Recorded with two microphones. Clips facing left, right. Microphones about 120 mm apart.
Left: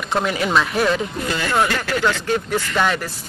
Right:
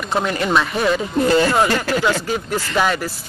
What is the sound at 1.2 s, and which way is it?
Speech, 35° right (ahead or behind).